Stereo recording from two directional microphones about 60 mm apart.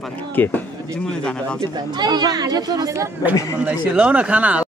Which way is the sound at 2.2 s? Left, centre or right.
Right.